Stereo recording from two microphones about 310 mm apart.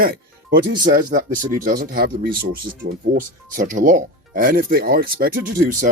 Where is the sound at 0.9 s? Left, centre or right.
Right.